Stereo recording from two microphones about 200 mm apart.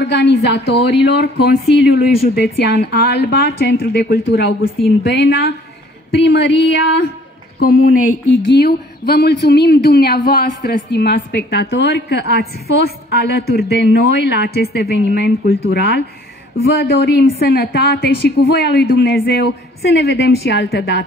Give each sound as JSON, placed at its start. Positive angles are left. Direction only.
{"t": 0.0, "sound": "a woman's voice", "side_deg": 60}
{"t": 7.5, "sound": "speech", "side_deg": 45}
{"t": 17.0, "sound": "speech", "side_deg": 55}